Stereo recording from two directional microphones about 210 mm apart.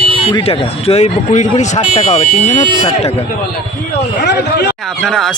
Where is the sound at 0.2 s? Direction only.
30° left (ahead or behind).